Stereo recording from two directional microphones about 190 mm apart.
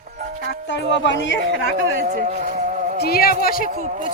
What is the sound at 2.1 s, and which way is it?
Music, 45° right (ahead or behind).